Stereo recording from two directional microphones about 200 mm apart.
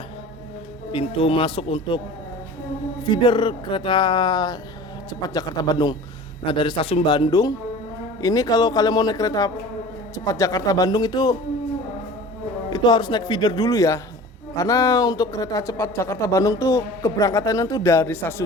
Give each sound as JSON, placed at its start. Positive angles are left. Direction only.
{"t": 0.9, "sound": "speech", "side_deg": 25}
{"t": 3.0, "sound": "speech", "side_deg": 25}
{"t": 12.7, "sound": "speech", "side_deg": 20}